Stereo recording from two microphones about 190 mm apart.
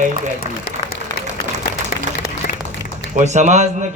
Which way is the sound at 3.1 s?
40° right (ahead or behind).